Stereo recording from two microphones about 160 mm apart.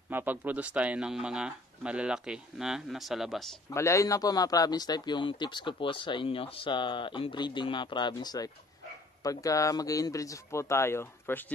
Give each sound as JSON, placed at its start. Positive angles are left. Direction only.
{"t": 0.1, "sound": "speech", "side_deg": -10}
{"t": 3.7, "sound": "speech", "side_deg": 20}